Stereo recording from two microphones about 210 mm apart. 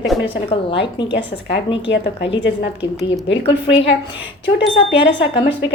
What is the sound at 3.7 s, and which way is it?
Speech, 60° left (ahead or behind).